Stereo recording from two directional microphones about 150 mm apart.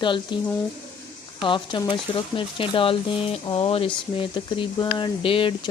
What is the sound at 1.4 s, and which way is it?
Speech, 35° left (ahead or behind).